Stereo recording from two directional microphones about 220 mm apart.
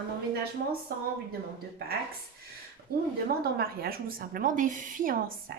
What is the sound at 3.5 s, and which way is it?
Speech, 45° right (ahead or behind).